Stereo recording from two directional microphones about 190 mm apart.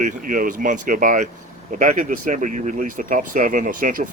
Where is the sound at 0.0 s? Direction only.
45° right (ahead or behind).